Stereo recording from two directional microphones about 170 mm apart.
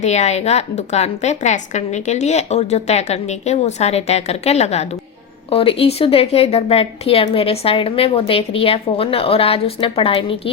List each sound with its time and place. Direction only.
0.0 s speech: 40° left (ahead or behind)